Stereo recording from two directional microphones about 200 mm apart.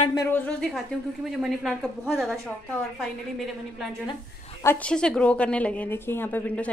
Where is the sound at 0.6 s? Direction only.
Centre (ahead or behind).